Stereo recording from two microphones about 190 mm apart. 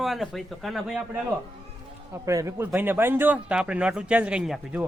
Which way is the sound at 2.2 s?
15° right (ahead or behind).